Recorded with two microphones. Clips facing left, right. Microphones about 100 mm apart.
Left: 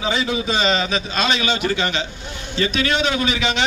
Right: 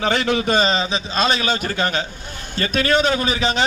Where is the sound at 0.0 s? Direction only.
60° right (ahead or behind).